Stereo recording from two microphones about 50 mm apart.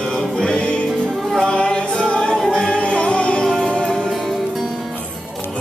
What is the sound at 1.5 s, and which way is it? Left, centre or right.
Music, centre.